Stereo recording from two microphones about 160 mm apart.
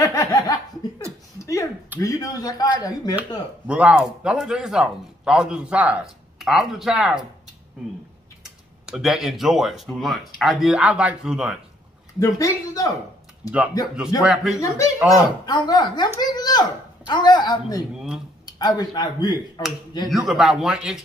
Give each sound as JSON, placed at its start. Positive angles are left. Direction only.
{"t": 0.0, "sound": "laughter", "side_deg": 25}
{"t": 1.4, "sound": "a sound", "side_deg": 20}
{"t": 2.0, "sound": "speech", "side_deg": 20}
{"t": 3.6, "sound": "speech", "side_deg": -5}
{"t": 8.8, "sound": "speech", "side_deg": -5}
{"t": 12.2, "sound": "speech", "side_deg": 20}
{"t": 14.2, "sound": "speech", "side_deg": 0}
{"t": 14.6, "sound": "speech", "side_deg": 20}
{"t": 20.1, "sound": "speech", "side_deg": 0}